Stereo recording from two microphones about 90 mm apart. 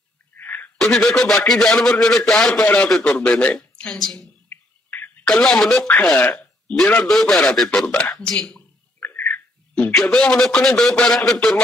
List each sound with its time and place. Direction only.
0.4 s a sound: 20° left (ahead or behind)
0.7 s a man's voice: centre (ahead or behind)
4.5 s a sound: 20° left (ahead or behind)
5.2 s a man's voice: 5° left (ahead or behind)
6.1 s speech: 15° left (ahead or behind)
7.1 s a man's voice: centre (ahead or behind); by 9.2 s 15° left (ahead or behind)
9.9 s a man's voice: 5° left (ahead or behind)